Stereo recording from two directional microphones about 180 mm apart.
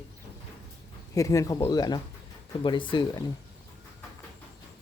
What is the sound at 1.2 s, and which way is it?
Speech, 20° left (ahead or behind).